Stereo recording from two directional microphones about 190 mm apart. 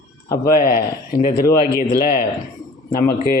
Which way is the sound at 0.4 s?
50° left (ahead or behind).